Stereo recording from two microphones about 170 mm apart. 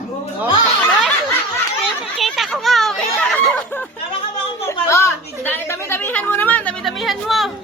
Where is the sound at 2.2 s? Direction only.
Centre (ahead or behind).